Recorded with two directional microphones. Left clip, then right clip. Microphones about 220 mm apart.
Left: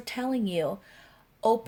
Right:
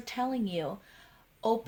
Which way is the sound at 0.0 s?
40° left (ahead or behind).